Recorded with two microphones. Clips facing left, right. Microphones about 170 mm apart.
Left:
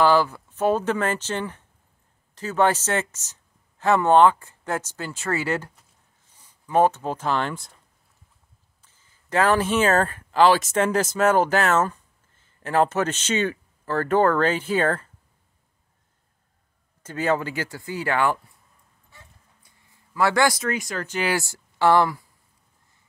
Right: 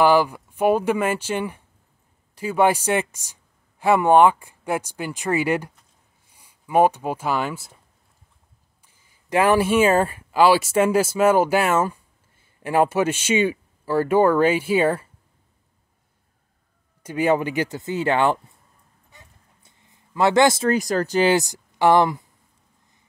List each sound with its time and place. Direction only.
0.0 s speech: 15° right (ahead or behind)
8.8 s speech: 10° right (ahead or behind)
17.0 s speech: 15° right (ahead or behind)
19.0 s a sound: 20° right (ahead or behind); by 21.3 s 35° right (ahead or behind)
21.3 s speech: 20° right (ahead or behind)